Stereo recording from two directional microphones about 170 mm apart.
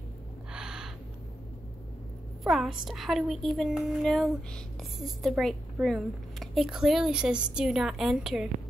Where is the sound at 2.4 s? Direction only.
Centre (ahead or behind).